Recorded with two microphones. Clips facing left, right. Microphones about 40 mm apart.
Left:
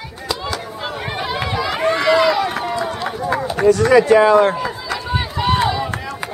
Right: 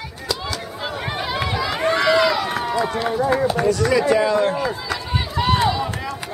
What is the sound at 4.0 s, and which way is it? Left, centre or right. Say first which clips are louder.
Speech: left 6 dB; left.